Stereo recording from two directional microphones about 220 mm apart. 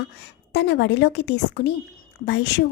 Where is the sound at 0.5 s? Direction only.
50° left (ahead or behind).